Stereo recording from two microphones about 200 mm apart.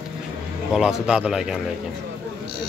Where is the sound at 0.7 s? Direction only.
5° right (ahead or behind).